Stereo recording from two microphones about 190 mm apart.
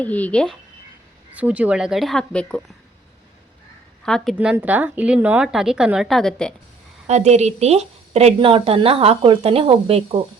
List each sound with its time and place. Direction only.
0.0 s speech: 10° left (ahead or behind)
1.4 s speech: 5° right (ahead or behind)
4.0 s speech: centre (ahead or behind)
4.4 s speech: 10° right (ahead or behind)
7.1 s a woman's voice: 35° right (ahead or behind)